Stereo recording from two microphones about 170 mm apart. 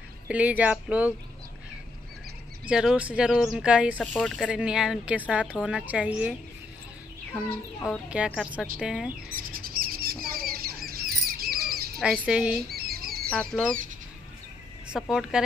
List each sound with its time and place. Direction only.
0.3 s speech: 10° right (ahead or behind)
2.6 s speech: 5° right (ahead or behind)
4.0 s speech: 5° left (ahead or behind)
7.8 s a woman's voice: 5° right (ahead or behind)
9.3 s bird: 55° right (ahead or behind)
10.2 s rodents: 60° right (ahead or behind)
12.0 s a woman's voice: 5° right (ahead or behind)
12.7 s chicken: 65° right (ahead or behind)
13.3 s a woman's voice: 5° left (ahead or behind)
14.9 s a woman's voice: 5° right (ahead or behind)